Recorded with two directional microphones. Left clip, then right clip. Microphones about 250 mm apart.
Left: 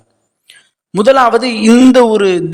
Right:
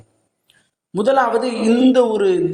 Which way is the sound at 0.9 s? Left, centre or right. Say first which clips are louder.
Left 7 dB; left.